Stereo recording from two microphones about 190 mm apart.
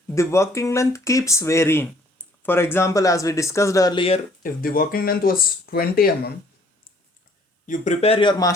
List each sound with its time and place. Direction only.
0.1 s speech: 15° left (ahead or behind)
4.4 s speech: 50° left (ahead or behind)
7.7 s speech: 35° left (ahead or behind)